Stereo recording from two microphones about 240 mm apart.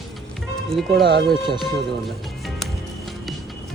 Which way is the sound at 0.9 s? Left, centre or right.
Right.